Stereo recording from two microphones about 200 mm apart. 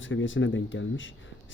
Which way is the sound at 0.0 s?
70° left (ahead or behind).